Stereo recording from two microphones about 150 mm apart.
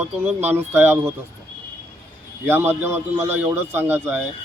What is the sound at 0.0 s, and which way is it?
Speech, 10° right (ahead or behind).